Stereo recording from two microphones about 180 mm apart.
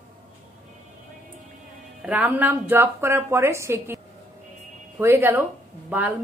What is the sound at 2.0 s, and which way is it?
A woman's voice, 10° right (ahead or behind).